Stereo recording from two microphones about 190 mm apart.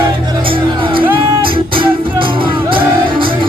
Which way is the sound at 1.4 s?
25° right (ahead or behind).